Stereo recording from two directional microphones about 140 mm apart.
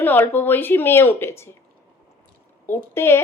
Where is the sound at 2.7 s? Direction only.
15° left (ahead or behind).